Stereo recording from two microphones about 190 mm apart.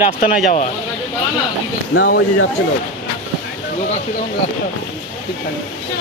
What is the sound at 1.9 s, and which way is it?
Speech, 65° left (ahead or behind).